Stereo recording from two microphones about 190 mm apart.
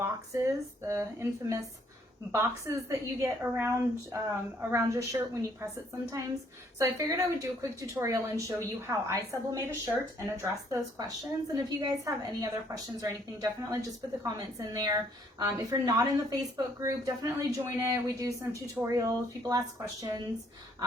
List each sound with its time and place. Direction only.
0.0 s a woman's voice: 15° right (ahead or behind)